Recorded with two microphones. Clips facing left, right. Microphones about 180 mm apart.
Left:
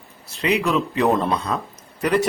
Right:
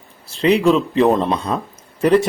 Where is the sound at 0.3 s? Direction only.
30° right (ahead or behind).